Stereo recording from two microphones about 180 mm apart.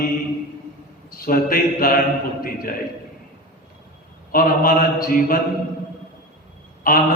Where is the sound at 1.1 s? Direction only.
55° left (ahead or behind).